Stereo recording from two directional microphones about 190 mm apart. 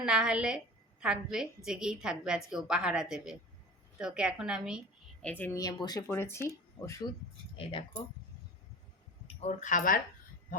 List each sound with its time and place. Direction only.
0.0 s a woman's voice: 5° right (ahead or behind)
5.2 s speech: 10° left (ahead or behind)
7.5 s speech: 30° left (ahead or behind)
9.2 s speech: 35° left (ahead or behind)